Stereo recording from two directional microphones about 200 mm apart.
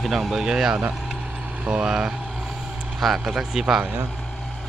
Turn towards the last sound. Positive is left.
turn(degrees=-5)  # may be behind; listen again after turning